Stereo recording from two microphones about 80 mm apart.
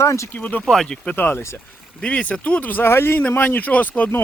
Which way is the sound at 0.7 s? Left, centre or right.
Centre.